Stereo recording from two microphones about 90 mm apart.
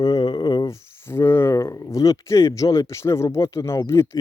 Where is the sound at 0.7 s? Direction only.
30° left (ahead or behind).